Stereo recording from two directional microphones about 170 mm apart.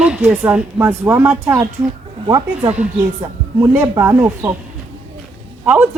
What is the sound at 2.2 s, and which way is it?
Speech, 20° right (ahead or behind).